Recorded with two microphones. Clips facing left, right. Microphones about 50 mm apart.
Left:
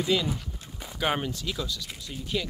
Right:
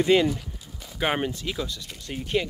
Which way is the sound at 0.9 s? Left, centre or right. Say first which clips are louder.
Right 2 dB; right.